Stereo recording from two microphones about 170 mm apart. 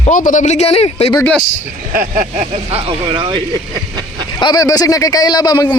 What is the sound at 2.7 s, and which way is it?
Speech, 30° right (ahead or behind).